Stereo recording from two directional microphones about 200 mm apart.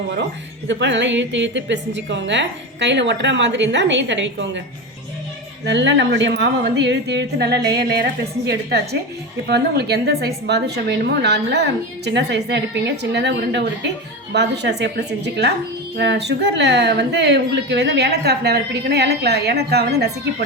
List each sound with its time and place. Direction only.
0.7 s speech: 65° right (ahead or behind)
5.6 s speech: 60° right (ahead or behind)